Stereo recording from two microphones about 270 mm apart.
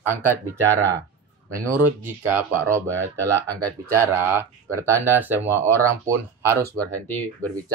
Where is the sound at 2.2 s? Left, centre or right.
Centre.